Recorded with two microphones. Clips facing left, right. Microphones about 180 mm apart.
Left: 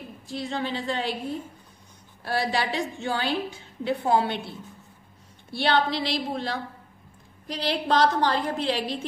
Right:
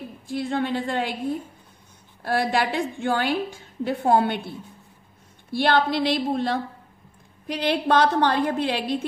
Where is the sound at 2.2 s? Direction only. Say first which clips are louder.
Right 4 dB; 50° right (ahead or behind).